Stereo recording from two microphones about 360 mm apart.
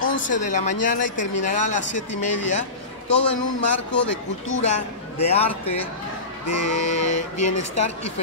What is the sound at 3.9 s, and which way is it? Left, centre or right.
Speech, left.